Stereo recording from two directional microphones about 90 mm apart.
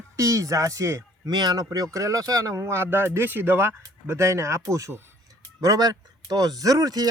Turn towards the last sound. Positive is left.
turn(degrees=-45)  # may be behind; listen again after turning